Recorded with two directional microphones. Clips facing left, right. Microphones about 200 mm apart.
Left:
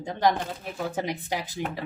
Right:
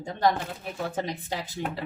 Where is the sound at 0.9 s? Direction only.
15° left (ahead or behind).